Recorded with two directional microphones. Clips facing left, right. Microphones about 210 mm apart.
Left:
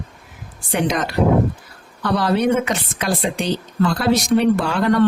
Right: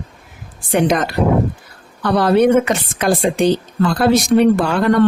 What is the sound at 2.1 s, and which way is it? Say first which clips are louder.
Speech: right 6 dB; 55° right (ahead or behind).